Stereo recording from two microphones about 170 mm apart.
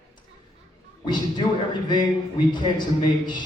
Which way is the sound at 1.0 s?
25° left (ahead or behind).